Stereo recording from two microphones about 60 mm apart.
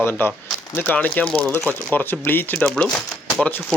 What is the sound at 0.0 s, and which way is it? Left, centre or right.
Speech, left.